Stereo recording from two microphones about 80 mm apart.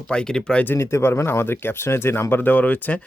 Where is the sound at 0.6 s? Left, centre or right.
Left.